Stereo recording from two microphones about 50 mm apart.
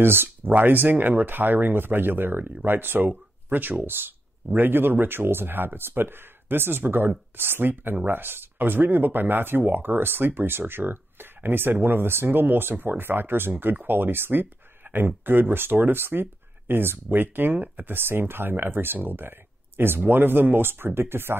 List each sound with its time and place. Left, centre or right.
0.0 s speech: right